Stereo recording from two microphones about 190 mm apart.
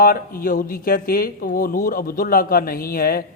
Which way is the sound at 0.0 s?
50° left (ahead or behind).